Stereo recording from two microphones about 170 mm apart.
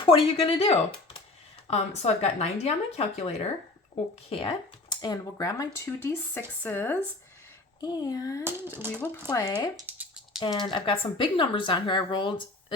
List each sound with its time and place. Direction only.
0.0 s speech: 35° left (ahead or behind); by 6.9 s 10° left (ahead or behind)
7.8 s speech: 20° left (ahead or behind)
8.8 s speech: 15° right (ahead or behind)
9.2 s speech: 20° left (ahead or behind)
9.7 s a sound: 10° right (ahead or behind)
10.4 s speech: 25° left (ahead or behind)